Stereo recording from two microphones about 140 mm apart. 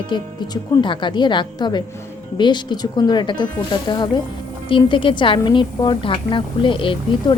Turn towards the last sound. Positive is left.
turn(degrees=40)  # may be behind; listen again after turning